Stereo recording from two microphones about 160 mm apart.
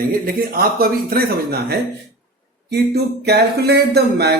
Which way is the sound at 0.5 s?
70° right (ahead or behind).